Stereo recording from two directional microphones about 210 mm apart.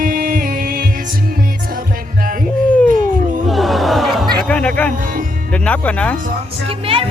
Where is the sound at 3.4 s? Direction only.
Centre (ahead or behind).